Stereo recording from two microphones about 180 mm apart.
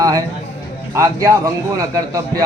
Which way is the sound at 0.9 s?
20° right (ahead or behind).